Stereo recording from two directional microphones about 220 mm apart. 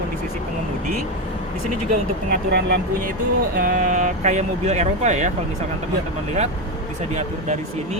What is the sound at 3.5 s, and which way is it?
Speech, 40° right (ahead or behind).